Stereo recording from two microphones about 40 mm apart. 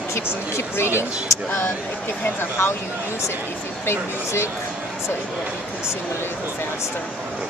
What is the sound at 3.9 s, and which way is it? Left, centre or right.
Speech, left.